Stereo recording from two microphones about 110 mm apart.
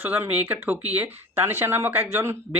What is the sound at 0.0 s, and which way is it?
Speech, 15° right (ahead or behind).